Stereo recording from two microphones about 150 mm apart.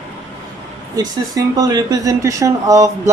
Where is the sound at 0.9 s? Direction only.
25° right (ahead or behind).